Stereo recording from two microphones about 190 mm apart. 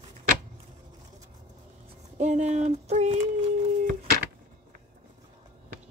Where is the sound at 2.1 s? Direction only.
40° right (ahead or behind).